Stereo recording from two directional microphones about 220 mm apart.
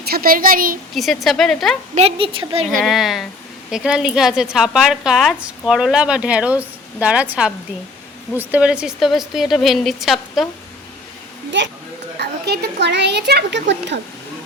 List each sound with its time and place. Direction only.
0.0 s a woman's voice: 45° right (ahead or behind)
0.9 s a woman's voice: centre (ahead or behind)
2.0 s a woman's voice: 25° right (ahead or behind)
2.6 s a woman's voice: centre (ahead or behind)
12.2 s a child's voice: 50° right (ahead or behind)